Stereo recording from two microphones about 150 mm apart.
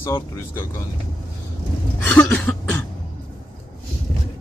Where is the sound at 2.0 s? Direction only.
10° left (ahead or behind).